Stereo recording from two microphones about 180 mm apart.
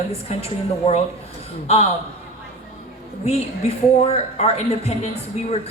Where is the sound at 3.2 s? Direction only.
35° left (ahead or behind).